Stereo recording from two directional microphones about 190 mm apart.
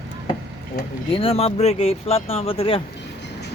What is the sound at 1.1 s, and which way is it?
Speech, 30° left (ahead or behind).